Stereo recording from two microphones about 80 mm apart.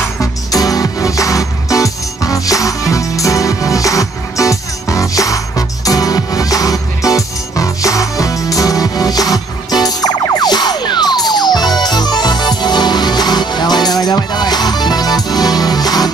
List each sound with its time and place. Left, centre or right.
0.2 s music: left